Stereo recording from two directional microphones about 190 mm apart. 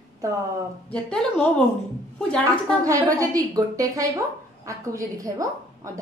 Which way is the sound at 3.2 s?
20° right (ahead or behind).